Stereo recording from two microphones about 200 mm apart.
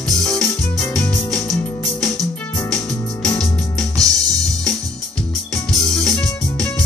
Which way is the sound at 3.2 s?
5° left (ahead or behind).